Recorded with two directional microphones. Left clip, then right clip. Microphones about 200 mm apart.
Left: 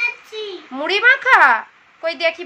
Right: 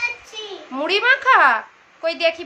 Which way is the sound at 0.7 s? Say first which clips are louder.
Left 3 dB; 5° left (ahead or behind).